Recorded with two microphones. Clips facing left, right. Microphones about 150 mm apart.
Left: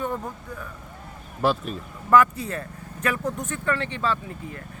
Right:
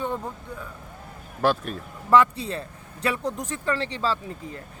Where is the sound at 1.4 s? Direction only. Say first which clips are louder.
Even; centre (ahead or behind).